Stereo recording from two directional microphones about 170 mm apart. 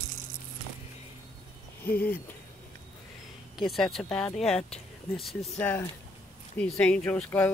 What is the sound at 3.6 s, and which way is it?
Speech, centre (ahead or behind).